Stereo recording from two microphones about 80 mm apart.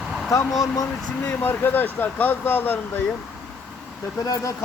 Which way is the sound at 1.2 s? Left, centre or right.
Left.